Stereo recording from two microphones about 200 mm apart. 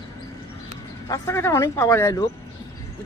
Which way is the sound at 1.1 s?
15° left (ahead or behind).